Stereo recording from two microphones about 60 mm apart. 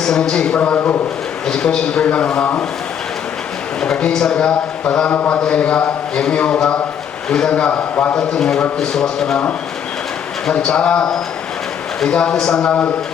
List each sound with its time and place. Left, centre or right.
0.0 s speech: centre
0.6 s a man's voice: left
1.5 s speech: centre
3.8 s speech: centre
5.1 s a man's voice: left
8.2 s speech: centre
10.4 s speech: centre